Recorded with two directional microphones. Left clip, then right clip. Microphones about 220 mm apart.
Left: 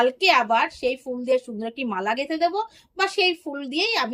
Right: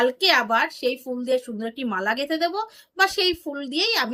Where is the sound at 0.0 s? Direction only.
15° right (ahead or behind).